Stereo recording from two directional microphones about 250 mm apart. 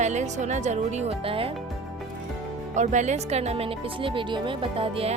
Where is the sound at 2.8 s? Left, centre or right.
Right.